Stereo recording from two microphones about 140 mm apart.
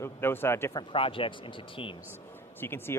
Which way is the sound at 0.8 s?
40° left (ahead or behind).